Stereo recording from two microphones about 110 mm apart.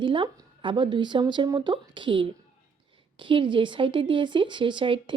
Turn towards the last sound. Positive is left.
turn(degrees=-50)  # may be behind; listen again after turning